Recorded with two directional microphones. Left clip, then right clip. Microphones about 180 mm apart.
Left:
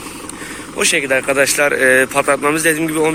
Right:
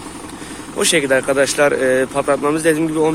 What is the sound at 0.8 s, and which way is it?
Speech, 20° right (ahead or behind).